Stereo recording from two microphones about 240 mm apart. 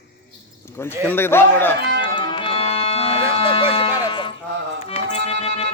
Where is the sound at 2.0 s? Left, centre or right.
Centre.